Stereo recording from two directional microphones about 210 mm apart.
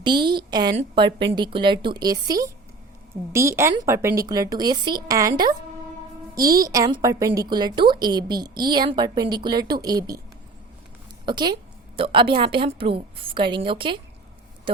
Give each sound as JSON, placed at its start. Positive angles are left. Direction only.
{"t": 0.3, "sound": "a woman's voice", "side_deg": -20}
{"t": 6.6, "sound": "a woman's voice", "side_deg": -15}
{"t": 11.3, "sound": "a woman's voice", "side_deg": -20}